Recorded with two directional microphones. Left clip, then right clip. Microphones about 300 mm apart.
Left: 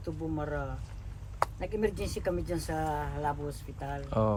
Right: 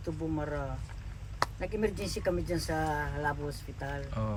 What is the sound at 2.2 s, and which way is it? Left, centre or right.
Speech, centre.